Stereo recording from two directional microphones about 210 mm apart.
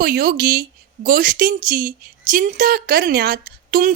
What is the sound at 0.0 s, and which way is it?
Speech, 45° right (ahead or behind).